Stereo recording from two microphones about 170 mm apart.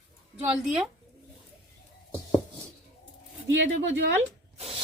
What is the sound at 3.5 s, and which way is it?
Speech, 90° right.